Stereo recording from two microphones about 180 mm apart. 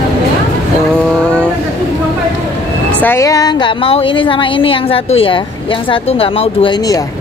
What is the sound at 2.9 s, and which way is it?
Speech, 10° left (ahead or behind).